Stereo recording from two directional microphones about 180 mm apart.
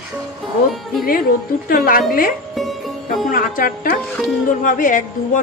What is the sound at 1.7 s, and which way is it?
Speech, 50° left (ahead or behind).